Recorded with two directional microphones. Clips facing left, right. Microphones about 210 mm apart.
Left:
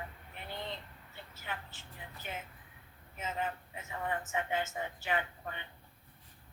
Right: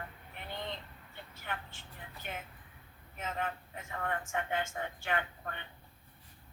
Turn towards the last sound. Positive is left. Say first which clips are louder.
# even
turn(degrees=5)  # may be behind; listen again after turning